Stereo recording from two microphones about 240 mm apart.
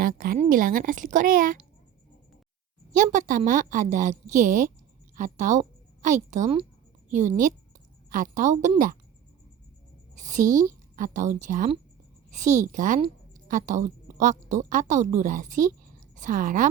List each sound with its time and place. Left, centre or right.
0.0 s a woman's voice: right
2.9 s a woman's voice: right
10.2 s a woman's voice: right